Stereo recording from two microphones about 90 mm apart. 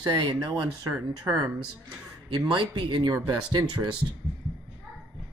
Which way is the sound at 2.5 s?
60° right (ahead or behind).